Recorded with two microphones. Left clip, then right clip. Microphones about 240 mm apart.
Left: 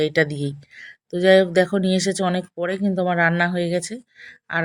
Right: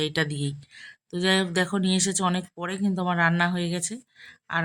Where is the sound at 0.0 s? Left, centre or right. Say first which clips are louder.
Left 7 dB; centre.